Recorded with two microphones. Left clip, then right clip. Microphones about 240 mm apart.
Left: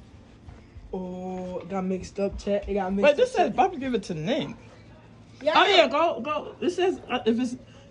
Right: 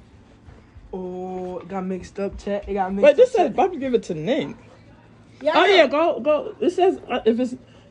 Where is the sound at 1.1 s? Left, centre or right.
Centre.